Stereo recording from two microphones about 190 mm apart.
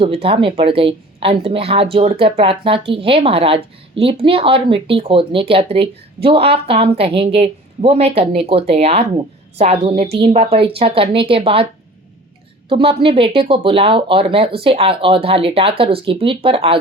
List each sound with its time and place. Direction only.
0.0 s speech: 30° right (ahead or behind)